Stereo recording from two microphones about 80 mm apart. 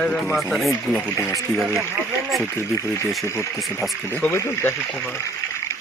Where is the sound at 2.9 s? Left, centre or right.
Left.